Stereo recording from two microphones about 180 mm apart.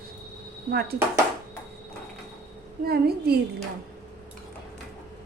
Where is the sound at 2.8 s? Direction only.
60° right (ahead or behind).